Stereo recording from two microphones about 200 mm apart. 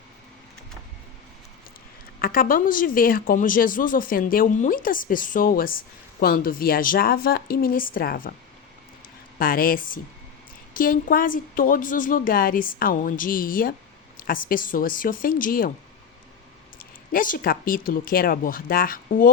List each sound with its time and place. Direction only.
2.1 s speech: 45° left (ahead or behind)
9.4 s speech: 45° left (ahead or behind)
16.7 s speech: 45° left (ahead or behind)